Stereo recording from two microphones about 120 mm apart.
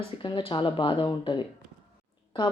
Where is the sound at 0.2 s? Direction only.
45° left (ahead or behind).